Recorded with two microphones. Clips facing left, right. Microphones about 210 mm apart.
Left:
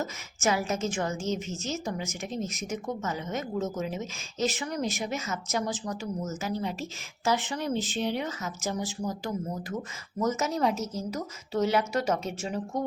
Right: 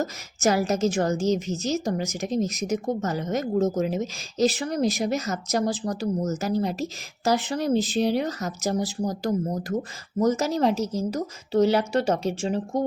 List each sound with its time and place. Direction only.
0.0 s speech: 40° right (ahead or behind)